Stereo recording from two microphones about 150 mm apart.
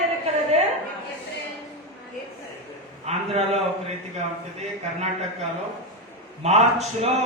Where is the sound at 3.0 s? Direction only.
45° right (ahead or behind).